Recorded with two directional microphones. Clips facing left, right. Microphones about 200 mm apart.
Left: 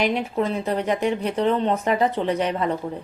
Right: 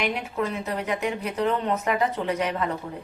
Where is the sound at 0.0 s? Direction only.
30° left (ahead or behind).